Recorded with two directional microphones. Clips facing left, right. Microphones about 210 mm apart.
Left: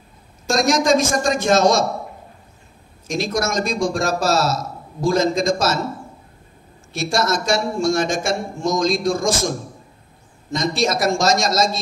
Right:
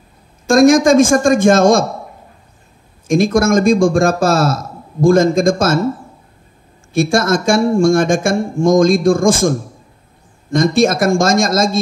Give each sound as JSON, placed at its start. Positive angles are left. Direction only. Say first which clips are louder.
{"t": 0.5, "sound": "speech", "louder": "right 8 dB", "side_deg": -50}
{"t": 3.1, "sound": "speech", "louder": "right 10 dB", "side_deg": -50}
{"t": 6.9, "sound": "speech", "louder": "right 7 dB", "side_deg": -50}